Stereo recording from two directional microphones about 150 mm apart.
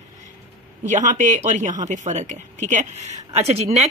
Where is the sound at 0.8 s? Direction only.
55° right (ahead or behind).